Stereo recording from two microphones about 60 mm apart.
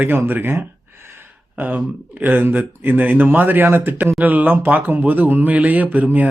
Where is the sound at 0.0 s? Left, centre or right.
Right.